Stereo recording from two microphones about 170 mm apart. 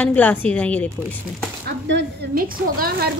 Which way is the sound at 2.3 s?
60° right (ahead or behind).